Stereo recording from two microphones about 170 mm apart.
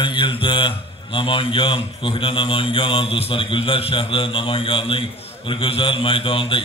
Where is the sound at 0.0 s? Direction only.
30° left (ahead or behind).